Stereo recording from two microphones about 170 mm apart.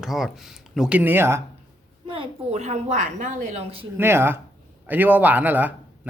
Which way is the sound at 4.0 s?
15° right (ahead or behind).